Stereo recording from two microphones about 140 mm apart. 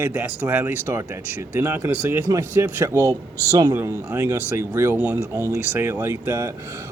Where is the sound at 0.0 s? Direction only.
15° right (ahead or behind).